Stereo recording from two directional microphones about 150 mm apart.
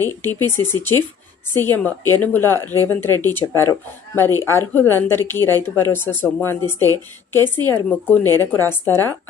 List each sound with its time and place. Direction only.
0.2 s speech: 15° left (ahead or behind)